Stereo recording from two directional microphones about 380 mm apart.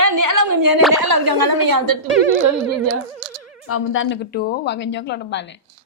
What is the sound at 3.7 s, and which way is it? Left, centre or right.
A woman's voice, left.